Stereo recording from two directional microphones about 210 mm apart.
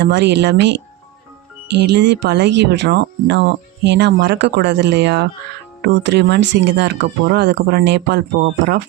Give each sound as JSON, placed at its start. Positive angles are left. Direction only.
{"t": 0.0, "sound": "speech", "side_deg": -55}